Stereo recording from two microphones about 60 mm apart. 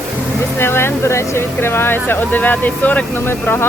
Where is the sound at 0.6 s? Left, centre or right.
Left.